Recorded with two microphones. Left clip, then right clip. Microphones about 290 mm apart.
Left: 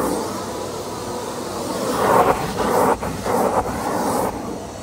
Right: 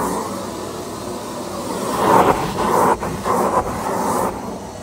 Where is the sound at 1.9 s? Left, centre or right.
Right.